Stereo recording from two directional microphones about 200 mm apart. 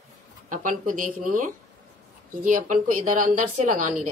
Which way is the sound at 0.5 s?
40° right (ahead or behind).